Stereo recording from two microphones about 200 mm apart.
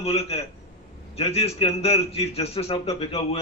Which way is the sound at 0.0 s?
30° left (ahead or behind).